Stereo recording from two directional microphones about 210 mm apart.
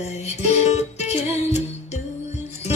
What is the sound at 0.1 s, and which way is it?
Music, 30° left (ahead or behind).